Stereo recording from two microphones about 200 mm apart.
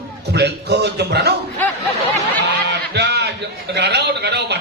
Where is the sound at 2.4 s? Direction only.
60° right (ahead or behind).